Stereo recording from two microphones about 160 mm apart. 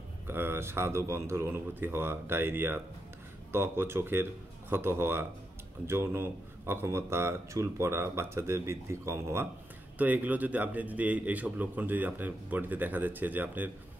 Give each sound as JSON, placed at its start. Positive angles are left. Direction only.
{"t": 0.3, "sound": "a man's voice", "side_deg": -15}